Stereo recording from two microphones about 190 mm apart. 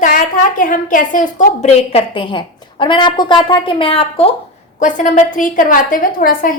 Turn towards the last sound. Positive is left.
turn(degrees=50)  # may be behind; listen again after turning